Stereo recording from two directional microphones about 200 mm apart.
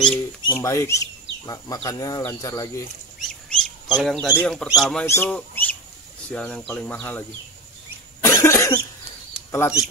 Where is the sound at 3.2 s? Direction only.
Centre (ahead or behind).